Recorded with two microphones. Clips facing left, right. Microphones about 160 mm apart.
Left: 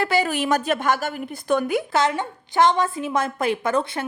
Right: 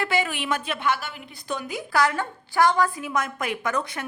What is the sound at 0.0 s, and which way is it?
A woman's voice, 40° left (ahead or behind).